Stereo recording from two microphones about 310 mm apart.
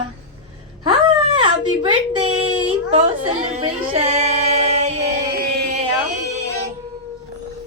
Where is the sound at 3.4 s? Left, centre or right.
Centre.